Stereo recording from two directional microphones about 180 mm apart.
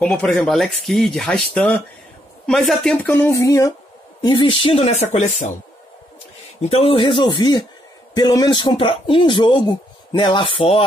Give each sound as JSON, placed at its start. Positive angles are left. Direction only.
{"t": 0.0, "sound": "speech", "side_deg": 5}
{"t": 6.6, "sound": "speech", "side_deg": 35}